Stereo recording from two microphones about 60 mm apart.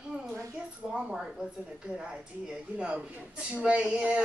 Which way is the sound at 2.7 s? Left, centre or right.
Centre.